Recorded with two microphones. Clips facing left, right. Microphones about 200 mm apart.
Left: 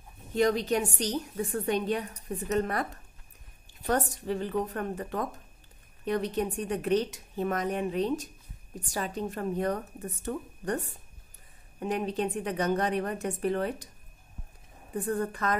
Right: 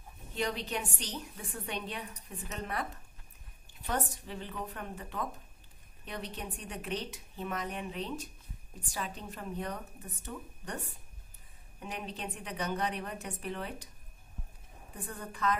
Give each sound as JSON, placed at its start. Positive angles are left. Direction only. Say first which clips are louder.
{"t": 0.3, "sound": "a woman's voice", "louder": "left 10 dB", "side_deg": 45}
{"t": 11.8, "sound": "a woman's voice", "louder": "left 11 dB", "side_deg": 45}
{"t": 15.0, "sound": "a woman's voice", "louder": "left 5 dB", "side_deg": 50}